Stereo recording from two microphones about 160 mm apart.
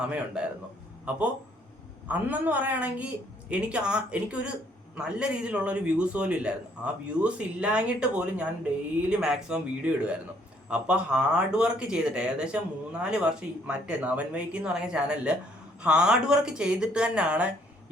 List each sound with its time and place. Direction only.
0.0 s a man's voice: 5° right (ahead or behind)